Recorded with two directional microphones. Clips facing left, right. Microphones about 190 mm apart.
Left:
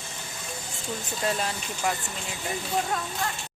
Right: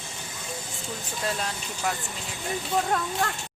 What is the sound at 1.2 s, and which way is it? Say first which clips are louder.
Speech: left 2 dB; 5° left (ahead or behind).